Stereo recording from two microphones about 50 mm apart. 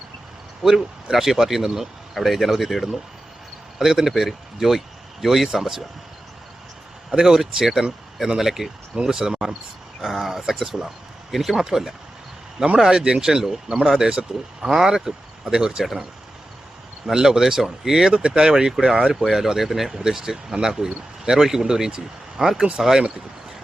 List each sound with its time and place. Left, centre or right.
0.6 s speech: centre
7.1 s speech: centre
10.0 s speech: centre
17.1 s speech: centre
18.1 s speech: centre